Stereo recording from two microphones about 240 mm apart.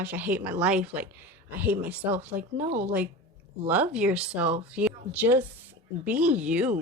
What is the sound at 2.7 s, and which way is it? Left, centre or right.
Speech, right.